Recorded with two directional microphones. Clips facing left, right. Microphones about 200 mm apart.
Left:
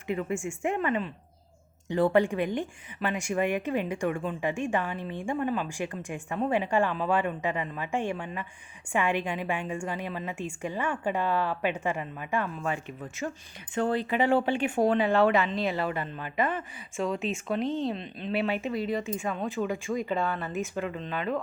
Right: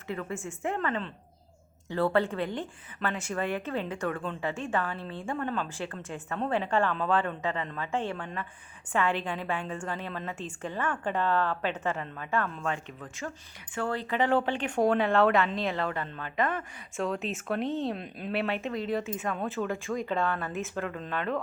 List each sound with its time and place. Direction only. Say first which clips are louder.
0.1 s a woman's voice: left 5 dB; 15° left (ahead or behind)